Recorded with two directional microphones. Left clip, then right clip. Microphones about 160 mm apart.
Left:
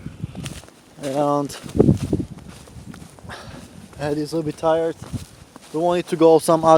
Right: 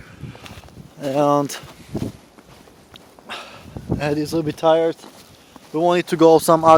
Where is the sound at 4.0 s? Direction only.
25° right (ahead or behind).